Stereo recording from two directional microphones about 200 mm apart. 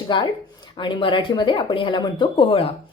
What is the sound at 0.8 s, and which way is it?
Speech, 25° left (ahead or behind).